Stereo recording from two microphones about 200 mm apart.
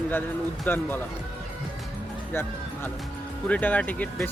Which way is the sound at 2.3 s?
10° left (ahead or behind).